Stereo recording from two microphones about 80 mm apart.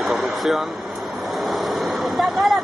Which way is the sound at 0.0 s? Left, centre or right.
Centre.